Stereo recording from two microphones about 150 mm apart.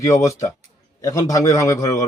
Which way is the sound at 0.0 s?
20° left (ahead or behind).